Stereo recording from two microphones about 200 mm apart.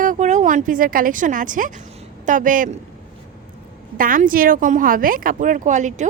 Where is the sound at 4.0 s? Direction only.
45° right (ahead or behind).